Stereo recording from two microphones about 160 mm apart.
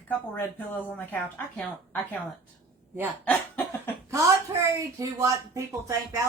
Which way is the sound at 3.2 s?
10° left (ahead or behind).